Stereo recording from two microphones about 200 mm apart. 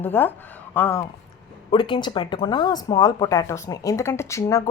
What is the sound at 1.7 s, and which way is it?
A woman's voice, 20° left (ahead or behind).